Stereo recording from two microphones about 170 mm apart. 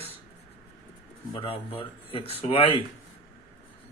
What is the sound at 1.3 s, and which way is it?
Speech, 35° left (ahead or behind).